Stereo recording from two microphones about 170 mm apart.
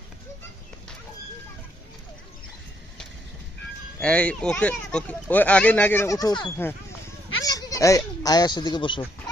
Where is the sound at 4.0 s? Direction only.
5° left (ahead or behind).